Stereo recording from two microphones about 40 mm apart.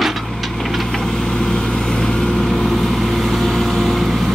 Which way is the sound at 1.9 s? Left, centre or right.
Centre.